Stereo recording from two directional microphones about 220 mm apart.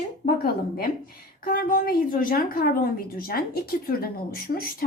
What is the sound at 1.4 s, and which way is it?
A woman's voice, 40° left (ahead or behind).